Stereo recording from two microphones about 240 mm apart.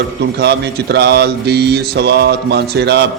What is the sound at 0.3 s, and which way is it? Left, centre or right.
A man's voice, right.